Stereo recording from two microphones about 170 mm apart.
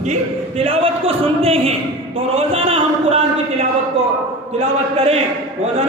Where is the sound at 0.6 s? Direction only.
35° right (ahead or behind).